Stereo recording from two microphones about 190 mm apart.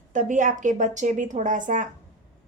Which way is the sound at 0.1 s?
40° right (ahead or behind).